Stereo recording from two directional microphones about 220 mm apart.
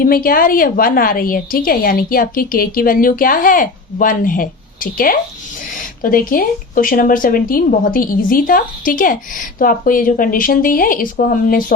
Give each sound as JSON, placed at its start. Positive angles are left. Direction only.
{"t": 0.0, "sound": "speech", "side_deg": 40}